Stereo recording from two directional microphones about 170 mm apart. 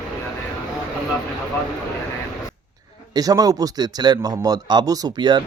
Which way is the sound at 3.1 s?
20° right (ahead or behind).